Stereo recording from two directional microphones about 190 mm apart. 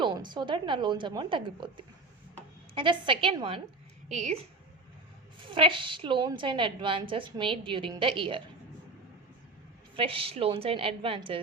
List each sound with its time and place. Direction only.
0.0 s a woman's voice: 25° right (ahead or behind)
4.1 s a woman's voice: 40° right (ahead or behind)
5.4 s a woman's voice: 25° right (ahead or behind)
9.9 s a woman's voice: 30° right (ahead or behind)